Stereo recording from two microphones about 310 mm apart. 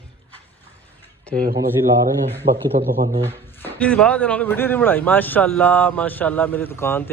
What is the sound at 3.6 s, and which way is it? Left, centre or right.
Speech, centre.